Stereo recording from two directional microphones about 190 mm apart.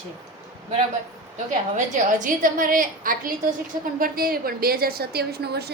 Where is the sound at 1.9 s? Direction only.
45° right (ahead or behind).